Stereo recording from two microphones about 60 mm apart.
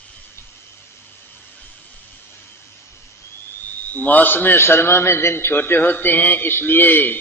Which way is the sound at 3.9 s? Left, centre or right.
Left.